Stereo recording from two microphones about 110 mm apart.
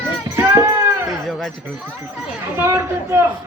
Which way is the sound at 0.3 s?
20° right (ahead or behind).